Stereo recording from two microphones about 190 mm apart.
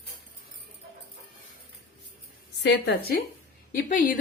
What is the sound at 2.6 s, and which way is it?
Speech, 60° left (ahead or behind).